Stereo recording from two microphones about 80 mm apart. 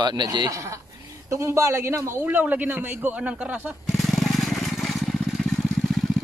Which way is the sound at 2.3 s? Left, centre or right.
Centre.